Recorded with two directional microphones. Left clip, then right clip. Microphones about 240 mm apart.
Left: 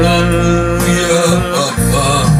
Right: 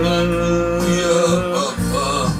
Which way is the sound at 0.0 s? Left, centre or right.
Left.